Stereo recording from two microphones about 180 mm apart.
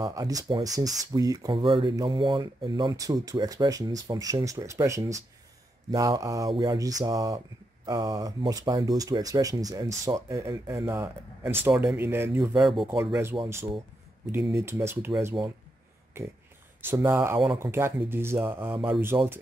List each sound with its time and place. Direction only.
0.0 s speech: 20° right (ahead or behind)
12.4 s speech: centre (ahead or behind)
12.9 s speech: 10° right (ahead or behind)
14.4 s speech: 15° right (ahead or behind)
16.1 s speech: 15° right (ahead or behind)